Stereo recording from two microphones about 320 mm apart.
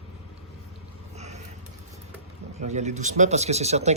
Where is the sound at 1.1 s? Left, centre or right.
Right.